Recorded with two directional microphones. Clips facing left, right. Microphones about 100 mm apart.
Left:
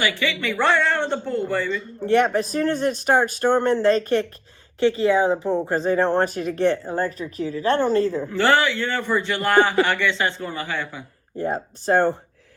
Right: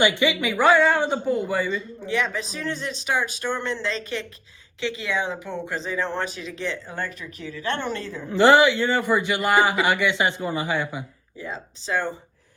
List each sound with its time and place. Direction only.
0.0 s a man's voice: 20° right (ahead or behind)
2.0 s speech: 55° left (ahead or behind)
6.9 s a woman's voice: 40° left (ahead or behind)
8.3 s a man's voice: 15° right (ahead or behind)
11.3 s speech: 55° left (ahead or behind)